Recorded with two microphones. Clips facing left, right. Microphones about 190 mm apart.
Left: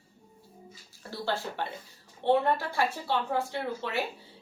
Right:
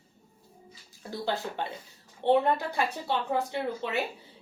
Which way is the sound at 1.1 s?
15° right (ahead or behind).